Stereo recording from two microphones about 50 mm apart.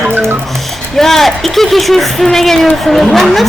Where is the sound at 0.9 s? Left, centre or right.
Centre.